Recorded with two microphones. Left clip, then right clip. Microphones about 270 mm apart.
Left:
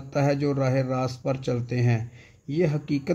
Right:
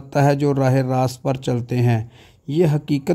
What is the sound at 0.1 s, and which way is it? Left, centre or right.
Speech, right.